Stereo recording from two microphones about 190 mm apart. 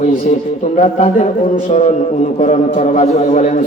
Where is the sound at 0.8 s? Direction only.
35° left (ahead or behind).